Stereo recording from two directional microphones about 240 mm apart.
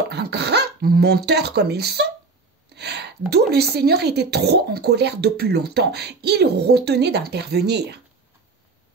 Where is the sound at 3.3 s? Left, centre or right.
Right.